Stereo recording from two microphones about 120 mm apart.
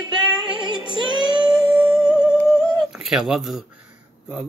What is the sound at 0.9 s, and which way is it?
Child singing, 40° right (ahead or behind).